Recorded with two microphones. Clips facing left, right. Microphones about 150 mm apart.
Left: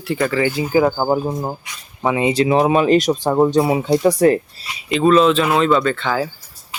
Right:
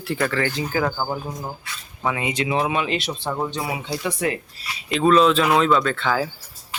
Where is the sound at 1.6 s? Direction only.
25° left (ahead or behind); by 4.3 s 40° left (ahead or behind).